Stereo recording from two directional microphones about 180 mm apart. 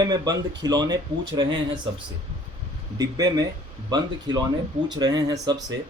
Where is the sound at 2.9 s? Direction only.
20° right (ahead or behind).